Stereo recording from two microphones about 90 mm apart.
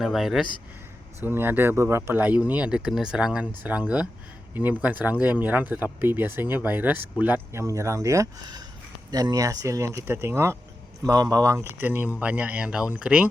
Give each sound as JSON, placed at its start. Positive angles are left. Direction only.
{"t": 0.0, "sound": "speech", "side_deg": -5}
{"t": 1.2, "sound": "speech", "side_deg": -25}
{"t": 7.5, "sound": "speech", "side_deg": -35}
{"t": 11.0, "sound": "speech", "side_deg": -40}
{"t": 11.5, "sound": "speech", "side_deg": -25}